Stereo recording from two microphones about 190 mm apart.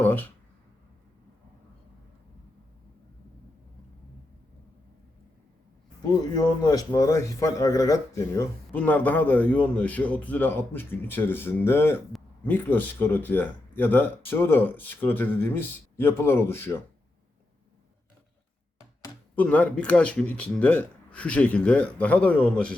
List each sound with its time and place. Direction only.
0.0 s speech: 10° left (ahead or behind)
6.3 s speech: 20° left (ahead or behind)
19.4 s speech: 5° left (ahead or behind)